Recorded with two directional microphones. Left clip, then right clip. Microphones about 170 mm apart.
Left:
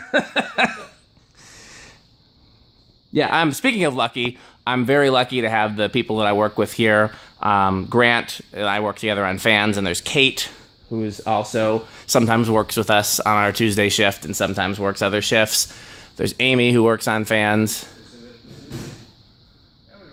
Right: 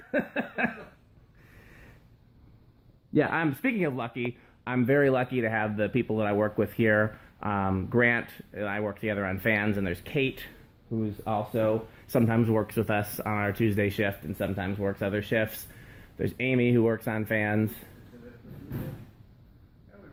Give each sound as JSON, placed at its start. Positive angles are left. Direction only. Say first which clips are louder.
{"t": 0.1, "sound": "a sound", "louder": "left 10 dB", "side_deg": 40}
{"t": 3.1, "sound": "speech", "louder": "left 6 dB", "side_deg": 20}
{"t": 3.3, "sound": "speech", "louder": "left 10 dB", "side_deg": 40}
{"t": 12.1, "sound": "speech", "louder": "left 9 dB", "side_deg": 40}